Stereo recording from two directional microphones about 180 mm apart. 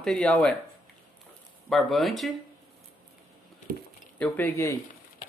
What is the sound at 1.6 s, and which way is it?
Speech, centre (ahead or behind).